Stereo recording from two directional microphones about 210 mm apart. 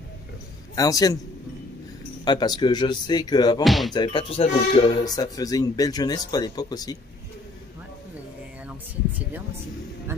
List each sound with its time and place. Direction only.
0.7 s speech: 15° left (ahead or behind)
2.2 s speech: 20° left (ahead or behind)
3.6 s speech: centre (ahead or behind)
3.9 s speech: 20° left (ahead or behind)